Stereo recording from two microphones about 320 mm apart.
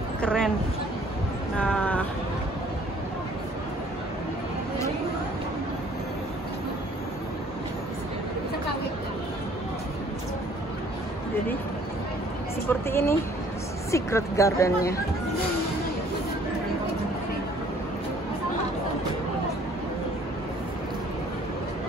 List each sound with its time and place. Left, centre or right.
0.2 s speech: centre
1.6 s a sound: centre
12.6 s speech: centre